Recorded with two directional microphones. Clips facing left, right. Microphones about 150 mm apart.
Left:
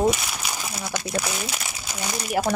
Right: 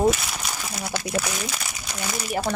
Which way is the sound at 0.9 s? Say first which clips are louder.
Right 1 dB; 15° left (ahead or behind).